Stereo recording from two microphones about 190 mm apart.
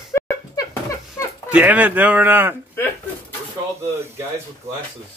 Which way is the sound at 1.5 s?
10° right (ahead or behind).